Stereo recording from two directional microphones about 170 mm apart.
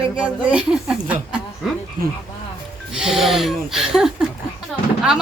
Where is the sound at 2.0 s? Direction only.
55° right (ahead or behind).